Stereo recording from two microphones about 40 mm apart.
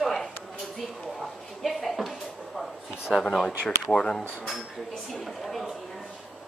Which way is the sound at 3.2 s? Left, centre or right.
Centre.